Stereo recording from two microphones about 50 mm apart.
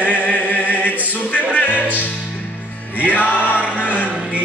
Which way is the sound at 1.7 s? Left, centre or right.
Right.